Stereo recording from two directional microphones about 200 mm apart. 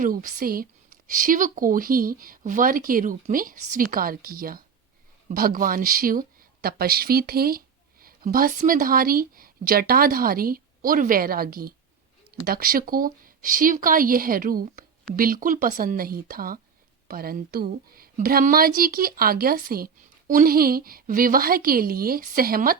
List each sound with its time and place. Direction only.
0.0 s speech: 45° right (ahead or behind)